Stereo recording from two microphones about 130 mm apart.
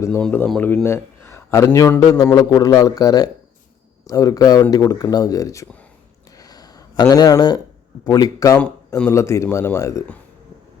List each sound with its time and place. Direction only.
0.2 s a man's voice: 10° left (ahead or behind); by 5.6 s 25° left (ahead or behind)
6.3 s a sound: 30° left (ahead or behind)
8.0 s a man's voice: 30° left (ahead or behind)